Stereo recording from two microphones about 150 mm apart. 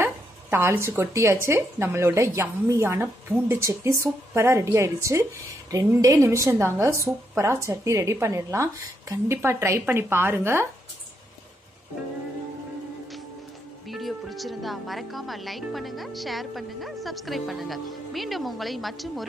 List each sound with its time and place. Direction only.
0.0 s a woman's voice: 15° right (ahead or behind)
13.8 s speech: centre (ahead or behind)